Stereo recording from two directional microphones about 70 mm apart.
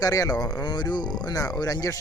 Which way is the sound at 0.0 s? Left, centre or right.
Left.